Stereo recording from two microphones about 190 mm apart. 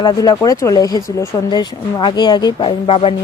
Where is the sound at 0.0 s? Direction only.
20° left (ahead or behind).